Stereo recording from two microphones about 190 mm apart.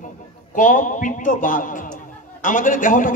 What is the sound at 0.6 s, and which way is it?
A man's voice, 45° left (ahead or behind).